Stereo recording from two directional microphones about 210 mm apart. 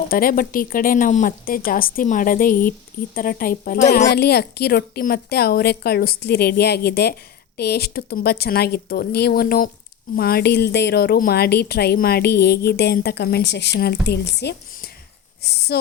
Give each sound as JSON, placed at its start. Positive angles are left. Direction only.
{"t": 0.1, "sound": "a woman's voice", "side_deg": 45}